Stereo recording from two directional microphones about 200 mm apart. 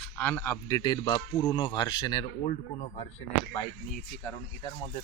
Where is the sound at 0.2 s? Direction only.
10° left (ahead or behind).